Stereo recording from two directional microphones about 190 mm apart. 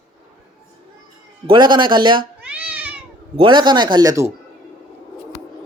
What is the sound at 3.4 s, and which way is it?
Speech, 25° right (ahead or behind).